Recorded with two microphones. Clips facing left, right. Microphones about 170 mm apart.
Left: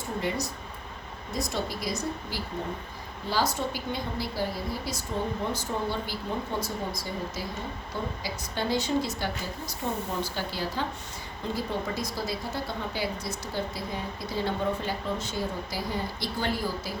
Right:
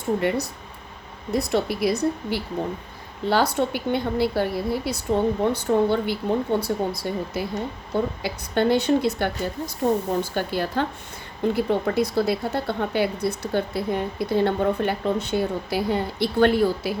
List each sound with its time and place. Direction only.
0.2 s a woman's voice: 60° right (ahead or behind)